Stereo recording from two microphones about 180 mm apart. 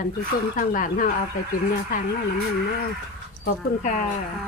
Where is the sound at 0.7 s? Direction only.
50° left (ahead or behind).